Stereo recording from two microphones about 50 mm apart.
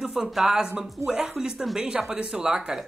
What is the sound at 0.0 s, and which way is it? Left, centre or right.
Speech, centre.